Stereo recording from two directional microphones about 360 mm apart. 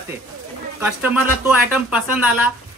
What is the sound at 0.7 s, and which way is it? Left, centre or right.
Speech, centre.